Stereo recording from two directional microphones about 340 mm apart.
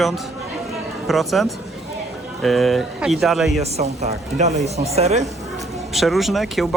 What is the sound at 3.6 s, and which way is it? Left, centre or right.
Speech, centre.